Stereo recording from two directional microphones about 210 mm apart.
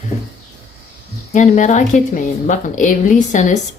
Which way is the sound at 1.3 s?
35° left (ahead or behind).